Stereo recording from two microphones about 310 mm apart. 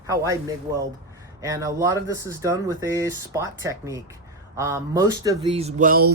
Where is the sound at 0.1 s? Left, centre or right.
Centre.